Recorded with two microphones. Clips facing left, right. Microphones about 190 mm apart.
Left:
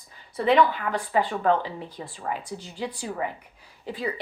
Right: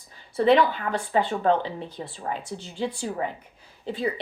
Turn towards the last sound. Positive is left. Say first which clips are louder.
# right 3 dB
turn(degrees=-25)  # may be behind; listen again after turning